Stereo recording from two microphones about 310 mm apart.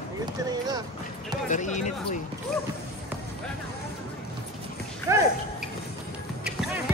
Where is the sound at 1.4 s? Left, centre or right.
Left.